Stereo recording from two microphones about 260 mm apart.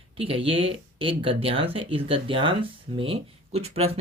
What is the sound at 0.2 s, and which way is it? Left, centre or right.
Speech, right.